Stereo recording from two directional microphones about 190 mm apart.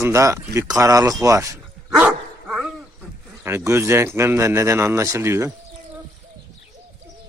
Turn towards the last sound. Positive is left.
turn(degrees=-15)  # may be behind; listen again after turning